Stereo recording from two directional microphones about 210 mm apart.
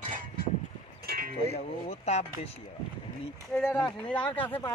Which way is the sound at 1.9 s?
30° left (ahead or behind).